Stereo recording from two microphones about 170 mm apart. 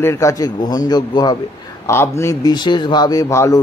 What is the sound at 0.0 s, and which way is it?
A man's voice, 15° left (ahead or behind).